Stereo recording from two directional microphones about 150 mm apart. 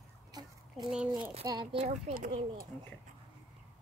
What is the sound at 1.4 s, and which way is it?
Speech, 25° right (ahead or behind).